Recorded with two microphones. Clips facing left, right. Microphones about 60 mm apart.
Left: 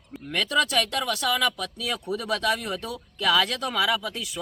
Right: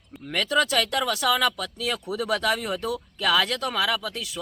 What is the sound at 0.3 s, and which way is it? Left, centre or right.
Speech, centre.